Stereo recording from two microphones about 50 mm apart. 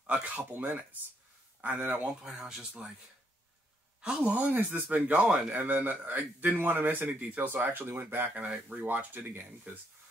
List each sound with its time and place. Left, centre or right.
0.0 s speech: right
1.6 s speech: right
2.0 s speech: centre
4.0 s speech: centre
4.3 s speech: right
8.4 s speech: right
8.8 s speech: right